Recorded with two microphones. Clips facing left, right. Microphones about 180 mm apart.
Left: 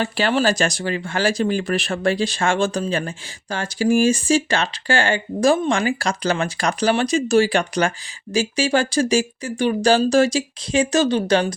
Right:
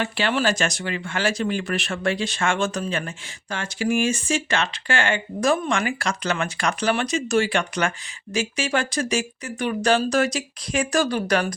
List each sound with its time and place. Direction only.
0.0 s speech: 35° left (ahead or behind)